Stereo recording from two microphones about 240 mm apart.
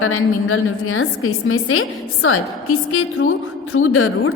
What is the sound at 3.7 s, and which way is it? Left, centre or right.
Speech, left.